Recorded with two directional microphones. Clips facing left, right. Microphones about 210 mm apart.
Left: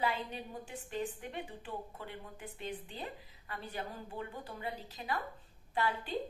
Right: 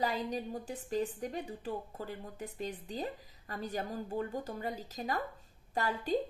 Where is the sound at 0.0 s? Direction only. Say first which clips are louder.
Right 3 dB; 40° right (ahead or behind).